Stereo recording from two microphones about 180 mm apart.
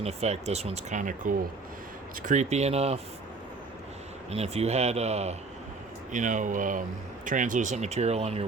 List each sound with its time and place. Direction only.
0.0 s speech: 35° right (ahead or behind)
4.3 s speech: 35° right (ahead or behind)